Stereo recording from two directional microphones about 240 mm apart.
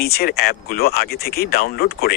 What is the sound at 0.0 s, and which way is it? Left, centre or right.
Speech, left.